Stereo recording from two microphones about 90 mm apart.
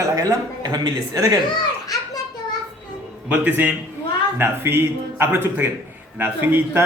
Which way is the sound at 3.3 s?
15° right (ahead or behind).